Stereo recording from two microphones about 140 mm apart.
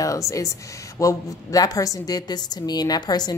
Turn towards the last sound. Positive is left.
turn(degrees=30)  # may be behind; listen again after turning